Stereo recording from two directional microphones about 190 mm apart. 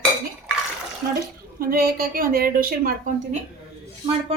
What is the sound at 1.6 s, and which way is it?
A woman's voice, 50° right (ahead or behind).